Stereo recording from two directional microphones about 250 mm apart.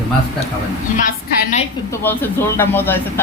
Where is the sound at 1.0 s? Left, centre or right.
Left.